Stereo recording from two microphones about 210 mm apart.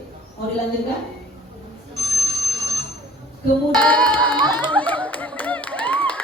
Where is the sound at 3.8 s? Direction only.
5° left (ahead or behind).